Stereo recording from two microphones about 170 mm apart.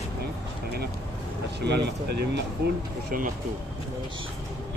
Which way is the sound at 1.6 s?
90° right.